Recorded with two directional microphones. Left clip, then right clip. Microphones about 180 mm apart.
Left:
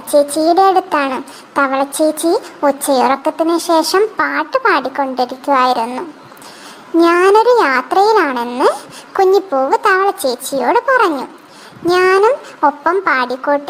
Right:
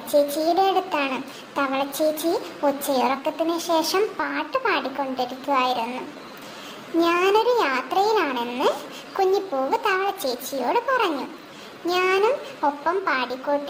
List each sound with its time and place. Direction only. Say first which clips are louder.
0.1 s speech: left 9 dB; 25° left (ahead or behind)
7.0 s speech: left 10 dB; 25° left (ahead or behind)